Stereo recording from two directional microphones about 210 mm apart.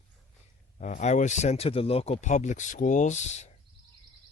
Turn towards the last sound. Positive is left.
turn(degrees=35)  # may be behind; listen again after turning